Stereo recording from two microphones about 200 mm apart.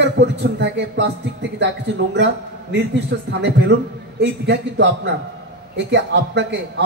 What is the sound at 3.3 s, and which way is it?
A man's voice, 55° right (ahead or behind).